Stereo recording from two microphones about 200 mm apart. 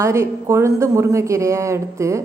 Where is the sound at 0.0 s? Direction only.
15° right (ahead or behind).